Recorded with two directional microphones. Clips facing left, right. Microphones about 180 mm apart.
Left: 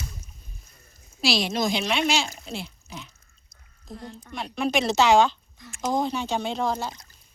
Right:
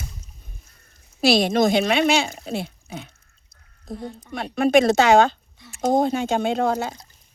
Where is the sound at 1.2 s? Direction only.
55° right (ahead or behind).